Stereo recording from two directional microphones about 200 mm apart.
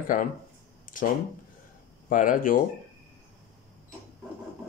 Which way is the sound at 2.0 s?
40° left (ahead or behind).